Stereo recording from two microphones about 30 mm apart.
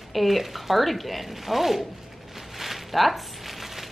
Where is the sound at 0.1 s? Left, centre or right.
Centre.